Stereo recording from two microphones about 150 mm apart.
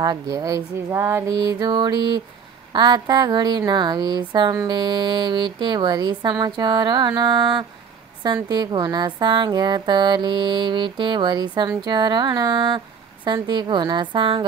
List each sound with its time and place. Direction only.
0.0 s speech: 25° right (ahead or behind)
1.3 s speech: 30° right (ahead or behind)
8.5 s music: 30° right (ahead or behind)